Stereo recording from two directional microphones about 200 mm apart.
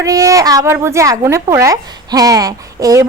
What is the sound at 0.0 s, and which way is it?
Speech, 15° right (ahead or behind).